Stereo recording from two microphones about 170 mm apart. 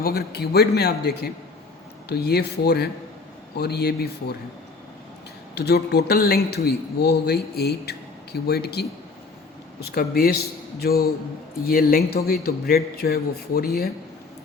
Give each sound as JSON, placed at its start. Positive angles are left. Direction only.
{"t": 0.0, "sound": "a man's voice", "side_deg": 65}
{"t": 5.5, "sound": "a man's voice", "side_deg": 70}